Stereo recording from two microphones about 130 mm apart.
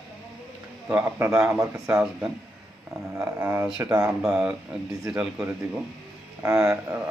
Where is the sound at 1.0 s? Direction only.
25° right (ahead or behind).